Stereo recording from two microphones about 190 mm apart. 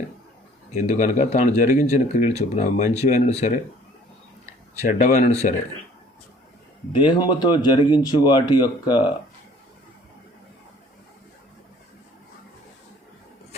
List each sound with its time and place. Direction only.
0.7 s speech: 35° left (ahead or behind)
4.9 s speech: 40° left (ahead or behind)
6.9 s speech: 25° left (ahead or behind)